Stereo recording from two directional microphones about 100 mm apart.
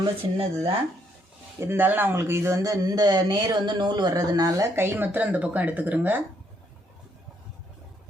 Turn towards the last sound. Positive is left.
turn(degrees=-20)  # may be behind; listen again after turning